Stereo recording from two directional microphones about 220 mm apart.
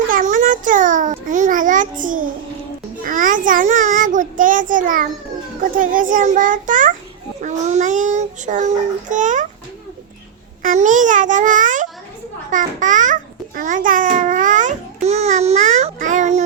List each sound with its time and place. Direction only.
0.1 s a sound: 35° right (ahead or behind)
3.0 s child singing: 35° right (ahead or behind)
5.7 s a child's voice: 35° right (ahead or behind)
10.6 s a child's voice: 35° right (ahead or behind)